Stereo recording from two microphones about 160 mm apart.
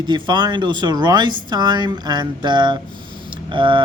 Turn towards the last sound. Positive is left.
turn(degrees=-30)  # may be behind; listen again after turning